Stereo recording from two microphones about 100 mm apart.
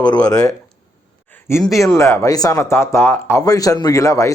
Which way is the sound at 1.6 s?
30° left (ahead or behind).